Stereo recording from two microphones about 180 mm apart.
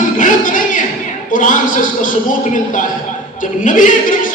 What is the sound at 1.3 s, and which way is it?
Speech, 45° left (ahead or behind).